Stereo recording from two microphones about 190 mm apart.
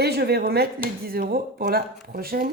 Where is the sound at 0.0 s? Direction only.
60° right (ahead or behind).